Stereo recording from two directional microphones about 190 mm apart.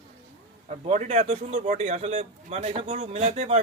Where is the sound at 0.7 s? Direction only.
35° right (ahead or behind).